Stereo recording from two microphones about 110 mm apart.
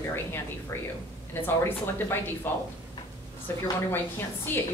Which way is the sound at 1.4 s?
20° left (ahead or behind).